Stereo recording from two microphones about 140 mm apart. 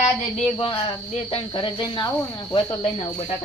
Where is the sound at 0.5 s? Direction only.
35° left (ahead or behind).